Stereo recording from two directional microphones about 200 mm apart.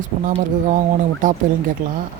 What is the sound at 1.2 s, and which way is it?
Speech, 40° right (ahead or behind).